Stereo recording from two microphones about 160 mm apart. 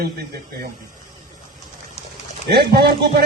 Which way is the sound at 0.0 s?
80° right.